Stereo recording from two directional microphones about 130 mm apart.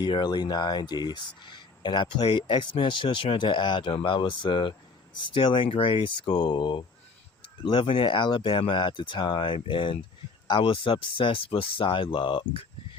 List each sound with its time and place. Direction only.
0.0 s speech: 35° left (ahead or behind)